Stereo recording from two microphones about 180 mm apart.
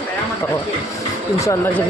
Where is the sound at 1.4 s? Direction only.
15° left (ahead or behind).